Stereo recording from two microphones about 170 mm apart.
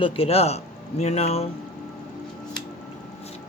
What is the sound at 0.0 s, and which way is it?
A man's voice, 30° left (ahead or behind).